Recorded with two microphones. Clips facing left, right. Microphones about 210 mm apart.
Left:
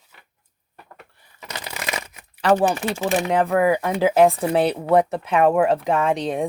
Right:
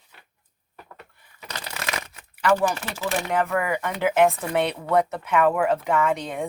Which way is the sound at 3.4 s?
35° left (ahead or behind).